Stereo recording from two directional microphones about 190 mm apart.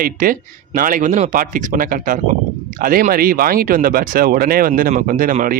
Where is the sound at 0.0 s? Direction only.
45° right (ahead or behind).